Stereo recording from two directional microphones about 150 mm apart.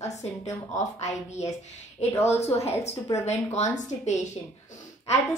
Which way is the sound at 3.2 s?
50° left (ahead or behind).